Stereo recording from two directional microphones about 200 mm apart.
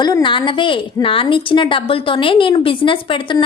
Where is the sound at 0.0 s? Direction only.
20° left (ahead or behind).